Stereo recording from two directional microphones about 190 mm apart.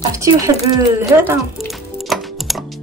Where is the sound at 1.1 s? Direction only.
10° right (ahead or behind).